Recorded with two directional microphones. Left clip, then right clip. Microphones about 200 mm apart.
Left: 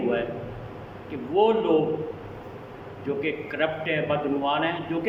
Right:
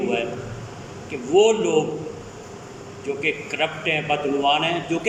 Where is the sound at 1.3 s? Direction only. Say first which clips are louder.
Right 4 dB; 10° right (ahead or behind).